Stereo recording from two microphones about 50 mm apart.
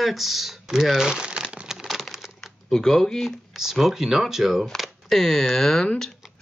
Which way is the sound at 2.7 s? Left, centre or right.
Centre.